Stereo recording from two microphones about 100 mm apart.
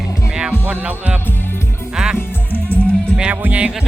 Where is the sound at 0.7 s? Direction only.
15° right (ahead or behind).